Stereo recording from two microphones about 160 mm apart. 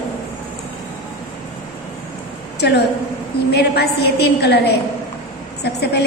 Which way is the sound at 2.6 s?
90° left.